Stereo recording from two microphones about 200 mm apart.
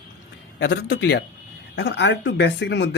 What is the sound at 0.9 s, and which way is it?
Speech, 55° left (ahead or behind).